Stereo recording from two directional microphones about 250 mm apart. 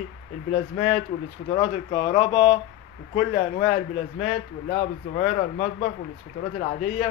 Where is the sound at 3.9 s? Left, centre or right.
Left.